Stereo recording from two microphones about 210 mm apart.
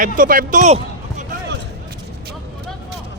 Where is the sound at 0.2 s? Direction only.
40° right (ahead or behind).